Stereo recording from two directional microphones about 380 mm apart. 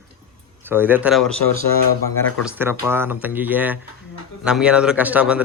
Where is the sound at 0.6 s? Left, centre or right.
Centre.